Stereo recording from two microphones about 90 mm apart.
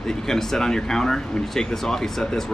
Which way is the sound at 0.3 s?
5° left (ahead or behind).